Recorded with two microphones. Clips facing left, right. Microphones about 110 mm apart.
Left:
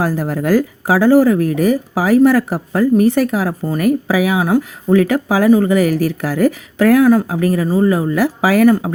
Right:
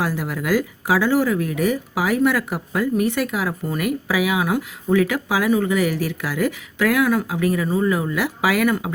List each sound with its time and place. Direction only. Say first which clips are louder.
0.0 s speech: left 6 dB; 40° left (ahead or behind)